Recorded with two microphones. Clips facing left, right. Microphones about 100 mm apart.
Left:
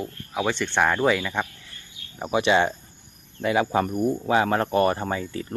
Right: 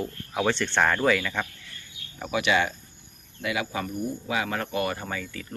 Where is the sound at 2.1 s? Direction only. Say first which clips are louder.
Left 4 dB; 30° left (ahead or behind); by 4.1 s 50° left (ahead or behind).